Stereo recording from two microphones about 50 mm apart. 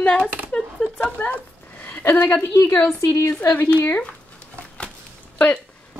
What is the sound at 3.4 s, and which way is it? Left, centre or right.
Speech, left.